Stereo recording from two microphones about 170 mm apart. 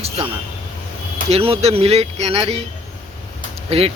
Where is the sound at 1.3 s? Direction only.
35° right (ahead or behind).